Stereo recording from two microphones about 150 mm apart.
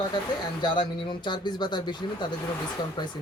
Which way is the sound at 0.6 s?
30° left (ahead or behind).